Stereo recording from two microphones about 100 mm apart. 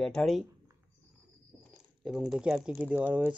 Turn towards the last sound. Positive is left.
turn(degrees=-15)  # may be behind; listen again after turning